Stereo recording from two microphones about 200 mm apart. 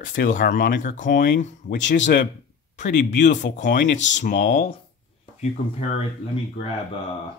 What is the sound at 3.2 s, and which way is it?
Speech, 40° left (ahead or behind).